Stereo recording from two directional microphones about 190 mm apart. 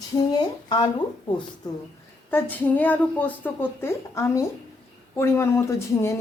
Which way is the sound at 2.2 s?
10° left (ahead or behind).